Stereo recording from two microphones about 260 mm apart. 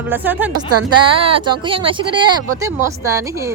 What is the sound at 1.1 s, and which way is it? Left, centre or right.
Speech, right.